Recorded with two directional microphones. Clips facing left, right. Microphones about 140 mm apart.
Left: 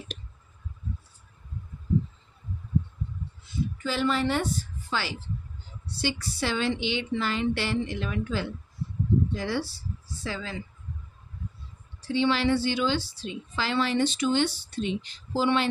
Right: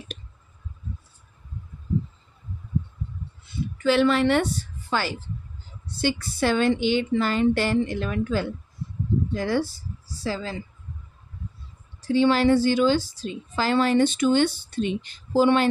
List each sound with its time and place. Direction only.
3.7 s a woman's voice: 75° right (ahead or behind); by 10.6 s 35° right (ahead or behind)
12.0 s a woman's voice: 45° right (ahead or behind)